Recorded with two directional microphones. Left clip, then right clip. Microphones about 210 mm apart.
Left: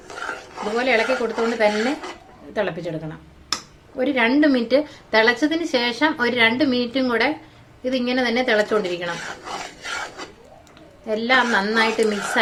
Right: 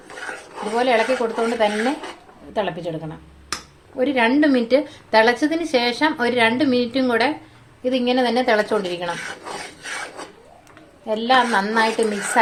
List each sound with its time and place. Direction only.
0.6 s a woman's voice: centre (ahead or behind)
11.0 s a woman's voice: centre (ahead or behind)